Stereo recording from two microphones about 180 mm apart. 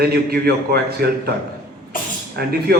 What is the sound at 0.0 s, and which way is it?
A man's voice, 60° right (ahead or behind).